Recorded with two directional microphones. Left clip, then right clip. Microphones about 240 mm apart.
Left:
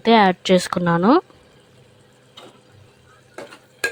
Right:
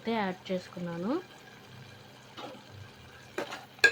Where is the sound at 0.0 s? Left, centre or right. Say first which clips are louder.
Left 18 dB; left.